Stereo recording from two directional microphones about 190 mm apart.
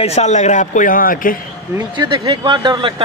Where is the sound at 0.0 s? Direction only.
35° left (ahead or behind).